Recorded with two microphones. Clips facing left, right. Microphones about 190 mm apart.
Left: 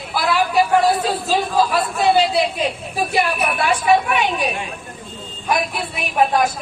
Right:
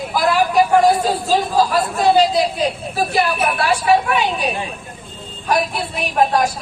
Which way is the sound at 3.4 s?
35° right (ahead or behind).